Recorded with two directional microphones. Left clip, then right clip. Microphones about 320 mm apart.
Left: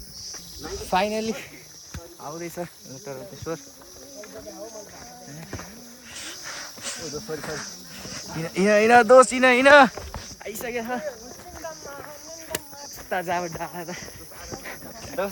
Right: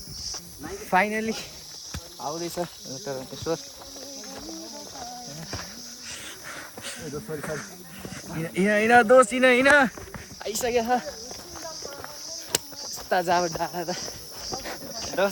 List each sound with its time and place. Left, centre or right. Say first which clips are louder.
0.8 s speech: right 1 dB; centre
2.2 s speech: right 3 dB; centre
6.2 s a sound: left 3 dB; centre
8.1 s speech: left 1 dB; centre
10.4 s speech: right 6 dB; centre
12.5 s a sound: right 5 dB; centre
13.1 s speech: right 4 dB; centre
15.2 s speech: right 4 dB; right